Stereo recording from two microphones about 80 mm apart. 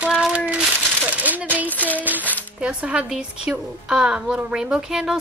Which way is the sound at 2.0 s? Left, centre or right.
Right.